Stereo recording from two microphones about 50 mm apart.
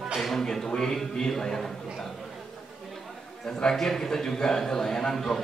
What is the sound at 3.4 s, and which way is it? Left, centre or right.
A man's voice, centre.